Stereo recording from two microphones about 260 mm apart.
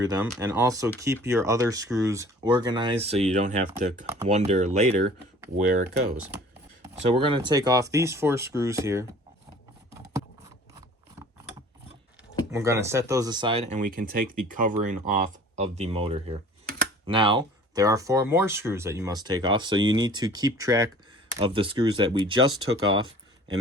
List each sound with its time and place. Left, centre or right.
0.0 s speech: centre
10.0 s a sound: centre
12.5 s speech: centre